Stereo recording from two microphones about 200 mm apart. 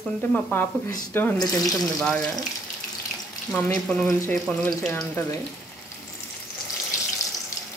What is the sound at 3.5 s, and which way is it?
Speech, 5° left (ahead or behind).